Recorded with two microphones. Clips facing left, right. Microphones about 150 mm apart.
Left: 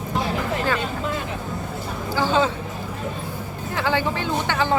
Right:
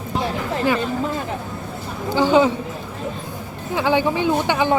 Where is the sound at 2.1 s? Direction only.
15° right (ahead or behind).